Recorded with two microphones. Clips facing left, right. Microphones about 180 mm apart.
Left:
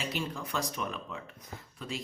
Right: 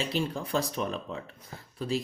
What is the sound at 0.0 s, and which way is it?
Speech, 30° right (ahead or behind).